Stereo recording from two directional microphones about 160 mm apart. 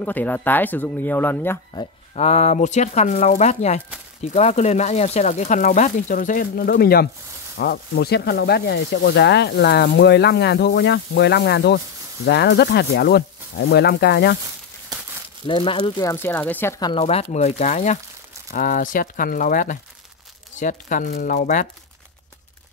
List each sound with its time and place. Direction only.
0.0 s speech: 10° left (ahead or behind)
2.1 s speech: 45° left (ahead or behind); by 7.1 s 75° left (ahead or behind)
7.5 s speech: 90° left
15.4 s speech: 30° left (ahead or behind); by 16.8 s 15° left (ahead or behind)
16.8 s speech: 35° left (ahead or behind)
18.5 s speech: 60° left (ahead or behind)